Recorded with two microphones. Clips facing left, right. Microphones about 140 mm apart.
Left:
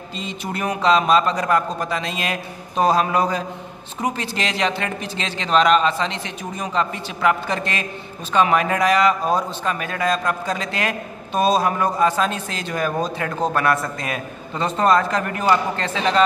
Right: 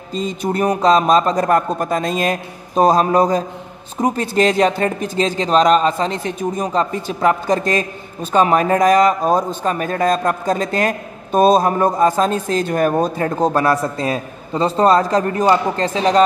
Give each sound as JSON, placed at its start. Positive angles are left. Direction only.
{"t": 0.1, "sound": "speech", "side_deg": -45}
{"t": 13.5, "sound": "speech", "side_deg": -30}